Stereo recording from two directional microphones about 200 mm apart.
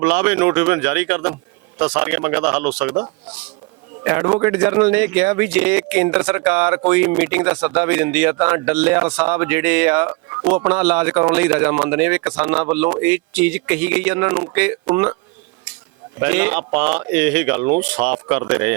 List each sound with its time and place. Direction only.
0.0 s a man's voice: 5° right (ahead or behind)
16.2 s a man's voice: 5° right (ahead or behind)